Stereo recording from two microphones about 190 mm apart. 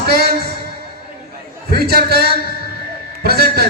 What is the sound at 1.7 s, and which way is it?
A man's voice, 55° right (ahead or behind).